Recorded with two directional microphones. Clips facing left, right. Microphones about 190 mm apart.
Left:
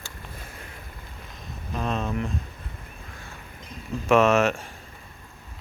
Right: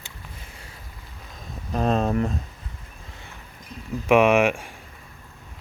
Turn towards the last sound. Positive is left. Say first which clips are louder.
# right 2 dB
turn(degrees=-10)  # may be behind; listen again after turning